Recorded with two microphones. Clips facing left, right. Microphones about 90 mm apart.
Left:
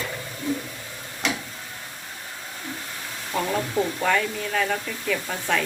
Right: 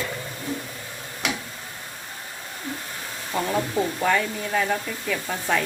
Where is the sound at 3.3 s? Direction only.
25° right (ahead or behind).